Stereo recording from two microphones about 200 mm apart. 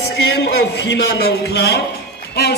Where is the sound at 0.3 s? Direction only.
55° left (ahead or behind).